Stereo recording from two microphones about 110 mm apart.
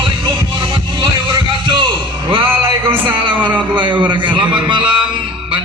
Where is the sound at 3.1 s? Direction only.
50° right (ahead or behind).